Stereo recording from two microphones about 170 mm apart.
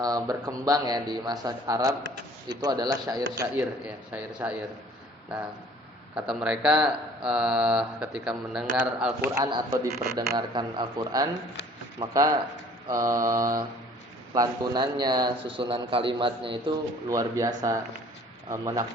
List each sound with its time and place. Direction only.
0.0 s a man's voice: 20° right (ahead or behind)
4.4 s a man's voice: 10° right (ahead or behind)
9.3 s a man's voice: 20° right (ahead or behind)
17.1 s a man's voice: 20° right (ahead or behind)